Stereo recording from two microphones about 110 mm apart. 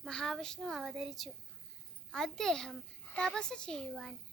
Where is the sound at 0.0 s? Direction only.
5° left (ahead or behind).